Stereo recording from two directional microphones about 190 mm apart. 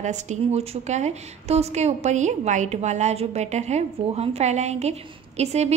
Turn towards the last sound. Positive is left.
turn(degrees=-35)  # may be behind; listen again after turning